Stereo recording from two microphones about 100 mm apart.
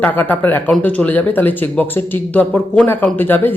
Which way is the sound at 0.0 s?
15° left (ahead or behind).